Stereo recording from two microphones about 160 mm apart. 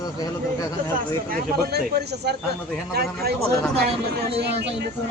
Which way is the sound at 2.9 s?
75° right (ahead or behind).